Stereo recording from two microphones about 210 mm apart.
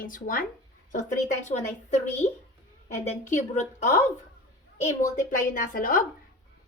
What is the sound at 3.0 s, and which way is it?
Speech, 30° left (ahead or behind).